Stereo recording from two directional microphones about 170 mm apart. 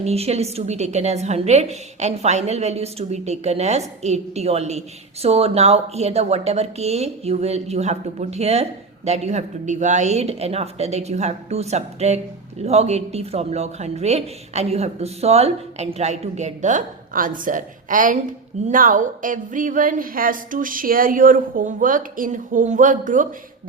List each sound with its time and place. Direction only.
0.0 s speech: 40° right (ahead or behind)